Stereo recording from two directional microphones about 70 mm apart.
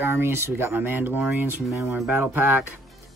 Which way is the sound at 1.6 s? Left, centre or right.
Centre.